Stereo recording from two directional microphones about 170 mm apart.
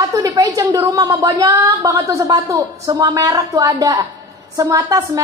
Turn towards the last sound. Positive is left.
turn(degrees=-20)  # may be behind; listen again after turning